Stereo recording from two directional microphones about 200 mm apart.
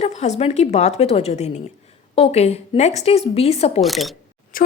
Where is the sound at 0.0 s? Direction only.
35° left (ahead or behind).